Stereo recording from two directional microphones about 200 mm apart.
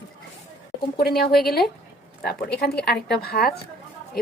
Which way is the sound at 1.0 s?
50° left (ahead or behind).